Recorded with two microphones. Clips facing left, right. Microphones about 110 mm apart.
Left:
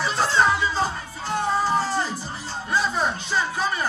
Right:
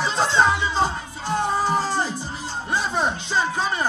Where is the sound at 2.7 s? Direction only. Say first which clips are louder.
Even; 25° right (ahead or behind).